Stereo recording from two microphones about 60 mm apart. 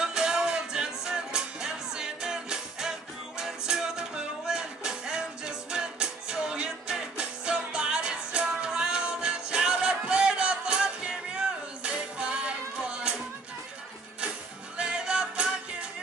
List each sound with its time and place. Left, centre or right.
0.0 s music: centre
14.8 s music: centre